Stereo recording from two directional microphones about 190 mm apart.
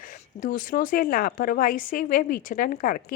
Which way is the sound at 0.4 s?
45° left (ahead or behind).